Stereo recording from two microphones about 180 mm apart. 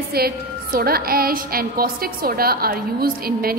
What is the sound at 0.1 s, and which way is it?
A woman's voice, 55° right (ahead or behind).